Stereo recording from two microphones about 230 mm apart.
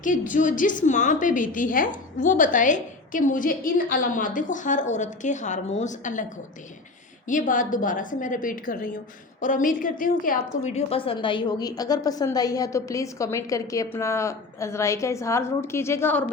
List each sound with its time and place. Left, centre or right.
0.0 s a woman's voice: left
7.3 s a woman's voice: left; by 16.2 s centre